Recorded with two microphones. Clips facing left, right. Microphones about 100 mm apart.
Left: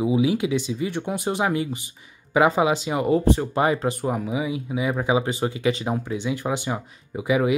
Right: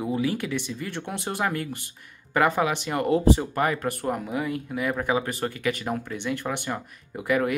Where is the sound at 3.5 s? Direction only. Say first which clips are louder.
Left 4 dB; 20° left (ahead or behind).